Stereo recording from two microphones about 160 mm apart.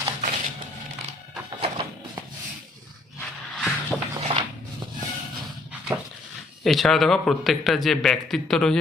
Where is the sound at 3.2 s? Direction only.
Centre (ahead or behind).